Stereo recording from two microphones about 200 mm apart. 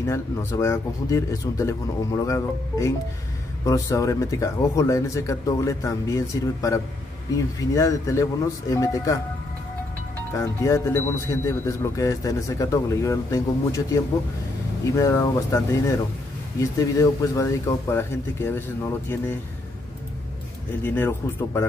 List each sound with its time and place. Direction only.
0.0 s speech: 15° left (ahead or behind)
10.3 s speech: 15° left (ahead or behind)
20.8 s speech: 10° left (ahead or behind)